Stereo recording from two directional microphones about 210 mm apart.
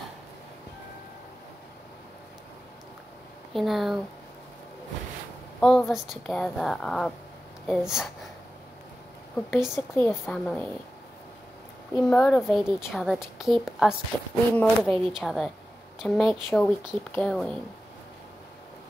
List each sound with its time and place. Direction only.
3.5 s a woman's voice: centre (ahead or behind)
5.6 s a woman's voice: centre (ahead or behind)
9.5 s a woman's voice: centre (ahead or behind)
9.9 s a woman's voice: 10° left (ahead or behind)
12.0 s a woman's voice: 5° left (ahead or behind)